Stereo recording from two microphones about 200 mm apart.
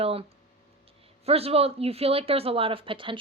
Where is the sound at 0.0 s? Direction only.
30° right (ahead or behind).